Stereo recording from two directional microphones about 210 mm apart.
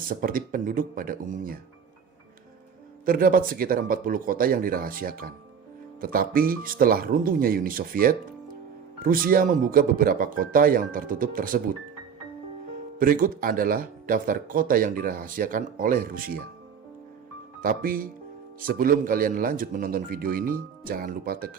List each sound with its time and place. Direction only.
0.1 s speech: 40° right (ahead or behind)
3.1 s speech: 40° right (ahead or behind)
13.0 s speech: 40° right (ahead or behind)
17.6 s speech: 40° right (ahead or behind)